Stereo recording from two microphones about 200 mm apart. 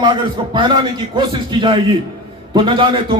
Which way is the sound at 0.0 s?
25° right (ahead or behind).